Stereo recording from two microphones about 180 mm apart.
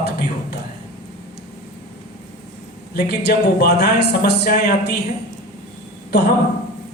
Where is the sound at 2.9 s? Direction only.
65° left (ahead or behind).